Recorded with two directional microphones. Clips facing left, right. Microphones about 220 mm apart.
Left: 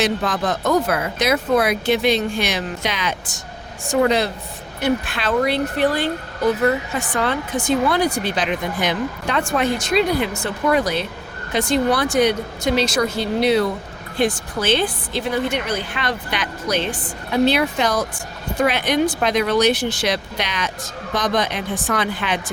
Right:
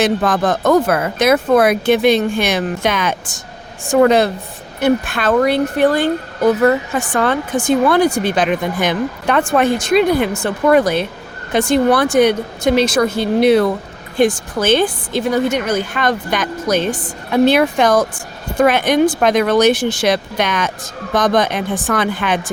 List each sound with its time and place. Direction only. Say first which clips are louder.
0.0 s speech: right 5 dB; 50° right (ahead or behind)